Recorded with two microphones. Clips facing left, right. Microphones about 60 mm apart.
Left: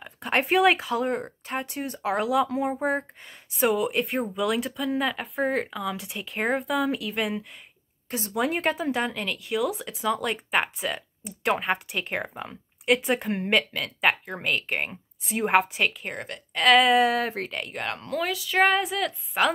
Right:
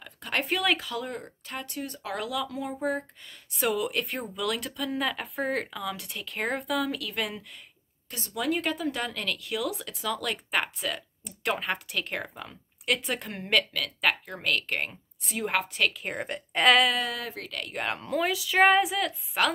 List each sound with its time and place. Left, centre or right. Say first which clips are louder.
0.0 s speech: left 5 dB; left
3.6 s speech: left 4 dB; centre
8.3 s speech: left 3 dB; left
8.9 s speech: left 4 dB; centre
10.0 s speech: left 5 dB; centre
15.3 s speech: left 7 dB; left
15.9 s a woman's voice: right 1 dB; centre
17.0 s speech: left 10 dB; left
17.7 s a woman's voice: right 1 dB; centre